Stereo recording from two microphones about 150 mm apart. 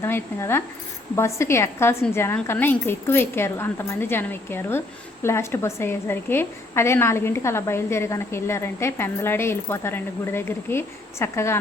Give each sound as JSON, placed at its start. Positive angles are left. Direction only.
{"t": 0.0, "sound": "a woman's voice", "side_deg": 15}